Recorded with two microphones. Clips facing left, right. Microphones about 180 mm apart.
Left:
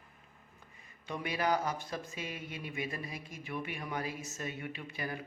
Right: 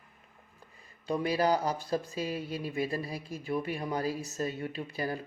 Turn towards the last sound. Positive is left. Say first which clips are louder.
# right 6 dB
turn(degrees=-35)  # may be behind; listen again after turning